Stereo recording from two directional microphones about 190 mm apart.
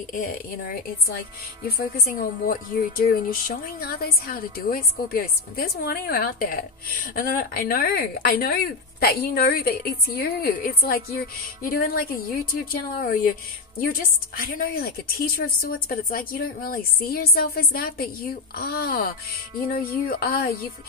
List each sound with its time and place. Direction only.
0.1 s speech: 45° left (ahead or behind)
2.1 s speech: 45° left (ahead or behind)